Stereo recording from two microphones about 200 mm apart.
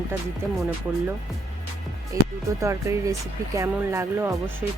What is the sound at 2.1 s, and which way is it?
Music, 15° right (ahead or behind).